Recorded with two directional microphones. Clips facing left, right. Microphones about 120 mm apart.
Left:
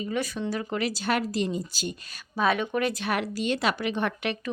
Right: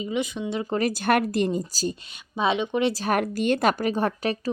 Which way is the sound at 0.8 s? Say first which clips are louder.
Right 6 dB; 50° right (ahead or behind).